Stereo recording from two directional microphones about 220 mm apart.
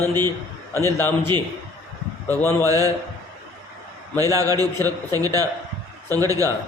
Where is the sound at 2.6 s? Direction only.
15° right (ahead or behind).